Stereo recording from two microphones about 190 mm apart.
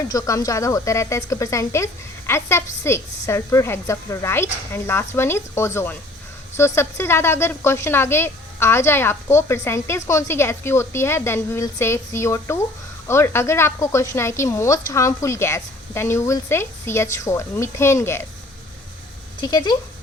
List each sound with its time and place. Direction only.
0.1 s a woman's voice: 20° left (ahead or behind)
19.4 s speech: 20° left (ahead or behind)